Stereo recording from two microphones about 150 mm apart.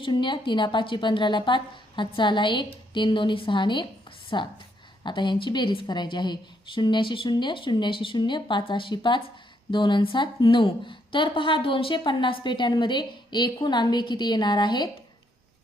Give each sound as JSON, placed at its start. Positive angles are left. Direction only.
{"t": 0.0, "sound": "a woman's voice", "side_deg": 30}